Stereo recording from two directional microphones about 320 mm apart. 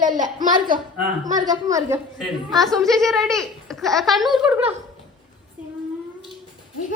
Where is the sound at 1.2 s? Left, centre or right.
Centre.